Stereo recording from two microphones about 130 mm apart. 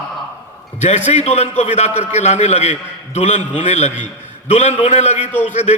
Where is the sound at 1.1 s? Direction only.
55° left (ahead or behind).